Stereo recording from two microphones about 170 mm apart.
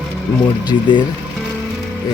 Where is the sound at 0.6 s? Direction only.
25° left (ahead or behind).